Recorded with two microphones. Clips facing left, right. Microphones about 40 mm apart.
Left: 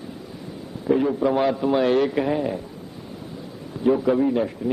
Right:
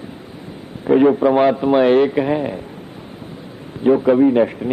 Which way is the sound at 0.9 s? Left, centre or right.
Right.